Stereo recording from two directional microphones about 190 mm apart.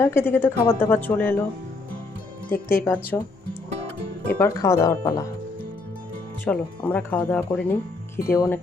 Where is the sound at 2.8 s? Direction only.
10° left (ahead or behind).